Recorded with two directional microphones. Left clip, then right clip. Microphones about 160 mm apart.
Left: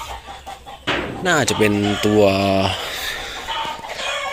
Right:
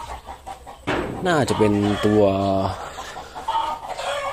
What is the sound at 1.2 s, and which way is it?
Speech, 5° right (ahead or behind).